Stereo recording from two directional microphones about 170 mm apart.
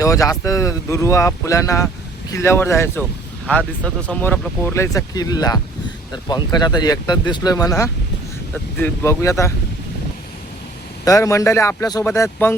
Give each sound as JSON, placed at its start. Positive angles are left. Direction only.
{"t": 0.0, "sound": "speech", "side_deg": 20}
{"t": 11.0, "sound": "speech", "side_deg": 20}